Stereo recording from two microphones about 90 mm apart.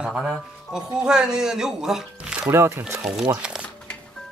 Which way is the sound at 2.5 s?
30° right (ahead or behind).